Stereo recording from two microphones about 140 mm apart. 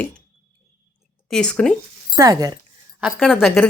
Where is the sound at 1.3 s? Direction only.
5° left (ahead or behind).